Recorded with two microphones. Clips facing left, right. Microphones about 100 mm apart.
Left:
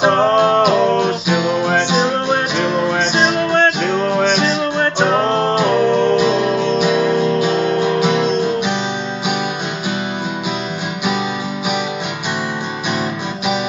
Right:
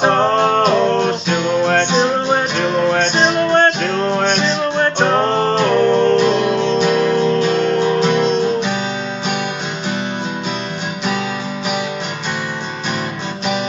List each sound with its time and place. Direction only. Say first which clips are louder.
0.0 s music: left 1 dB; centre (ahead or behind)